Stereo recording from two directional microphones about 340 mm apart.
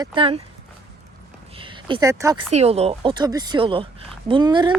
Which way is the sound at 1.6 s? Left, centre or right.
Centre.